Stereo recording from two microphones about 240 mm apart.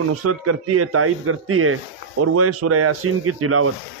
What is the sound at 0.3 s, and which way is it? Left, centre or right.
Speech, right.